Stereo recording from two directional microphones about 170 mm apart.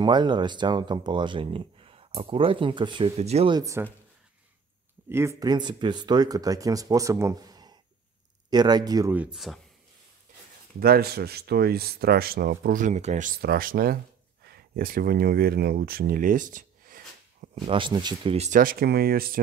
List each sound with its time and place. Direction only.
0.0 s speech: 25° right (ahead or behind)
3.5 s speech: 20° right (ahead or behind)
5.1 s speech: 15° right (ahead or behind)
9.1 s speech: 5° right (ahead or behind)
10.8 s speech: 65° right (ahead or behind); by 13.3 s 45° right (ahead or behind)
13.4 s speech: 60° right (ahead or behind)
17.6 s speech: 30° right (ahead or behind)
18.6 s speech: 60° right (ahead or behind)